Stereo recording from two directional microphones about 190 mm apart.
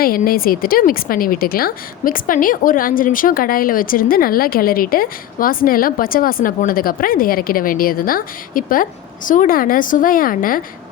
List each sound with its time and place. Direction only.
0.0 s a woman's voice: 50° left (ahead or behind)